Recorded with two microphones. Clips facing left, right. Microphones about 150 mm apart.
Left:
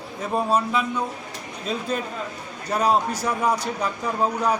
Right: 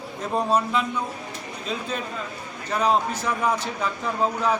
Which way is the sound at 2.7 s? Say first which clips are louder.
Left 1 dB; 10° left (ahead or behind).